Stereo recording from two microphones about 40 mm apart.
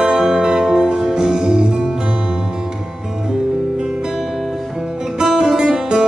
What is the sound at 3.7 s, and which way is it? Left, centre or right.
Music, centre.